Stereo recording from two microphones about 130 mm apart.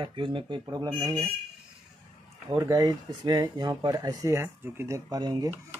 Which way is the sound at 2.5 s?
25° right (ahead or behind).